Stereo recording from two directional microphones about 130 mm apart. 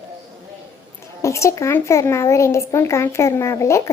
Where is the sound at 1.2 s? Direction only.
20° left (ahead or behind).